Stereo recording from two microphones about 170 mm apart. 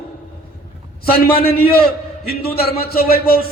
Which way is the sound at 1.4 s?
65° left (ahead or behind).